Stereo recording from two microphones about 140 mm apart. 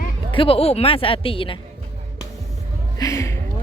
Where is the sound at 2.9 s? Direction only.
25° left (ahead or behind).